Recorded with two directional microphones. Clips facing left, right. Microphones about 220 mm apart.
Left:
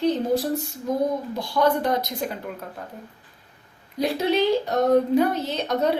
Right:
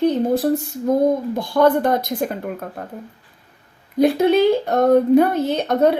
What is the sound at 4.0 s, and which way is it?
Speech, 55° right (ahead or behind).